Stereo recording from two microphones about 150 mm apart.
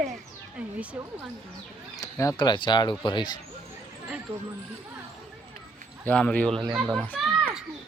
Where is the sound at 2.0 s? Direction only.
20° left (ahead or behind).